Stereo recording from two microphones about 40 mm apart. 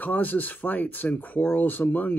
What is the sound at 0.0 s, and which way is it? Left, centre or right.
Speech, left.